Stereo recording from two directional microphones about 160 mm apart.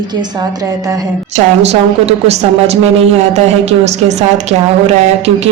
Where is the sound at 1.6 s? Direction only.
40° right (ahead or behind).